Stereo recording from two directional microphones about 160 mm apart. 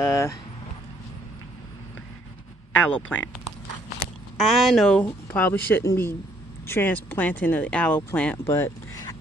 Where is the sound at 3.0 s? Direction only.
10° left (ahead or behind).